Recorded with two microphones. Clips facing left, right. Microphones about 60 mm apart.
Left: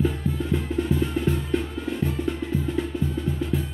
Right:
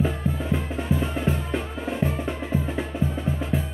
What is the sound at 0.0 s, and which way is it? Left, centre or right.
Music, centre.